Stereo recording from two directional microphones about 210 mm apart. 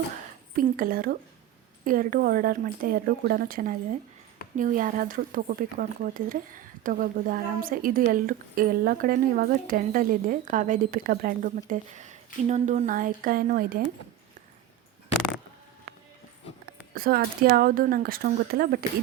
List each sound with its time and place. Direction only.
0.5 s speech: 45° right (ahead or behind)
16.9 s speech: 45° right (ahead or behind)